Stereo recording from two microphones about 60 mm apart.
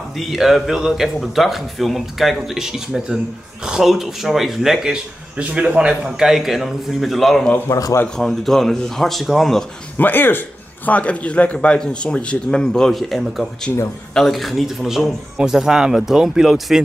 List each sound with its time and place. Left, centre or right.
0.2 s a man's voice: centre
5.4 s speech: centre
6.2 s a man's voice: centre
7.7 s a man's voice: left
8.2 s a man's voice: centre
9.9 s speech: left
10.9 s a man's voice: left
12.9 s a man's voice: centre